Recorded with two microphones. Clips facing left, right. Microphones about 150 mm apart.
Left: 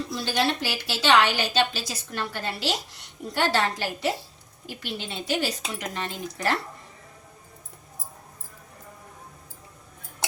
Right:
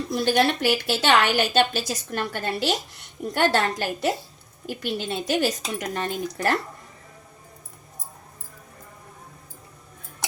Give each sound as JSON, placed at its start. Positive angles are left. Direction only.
{"t": 0.1, "sound": "a woman's voice", "side_deg": -50}